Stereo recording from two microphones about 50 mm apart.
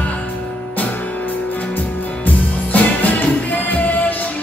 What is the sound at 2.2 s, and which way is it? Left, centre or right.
Music, left.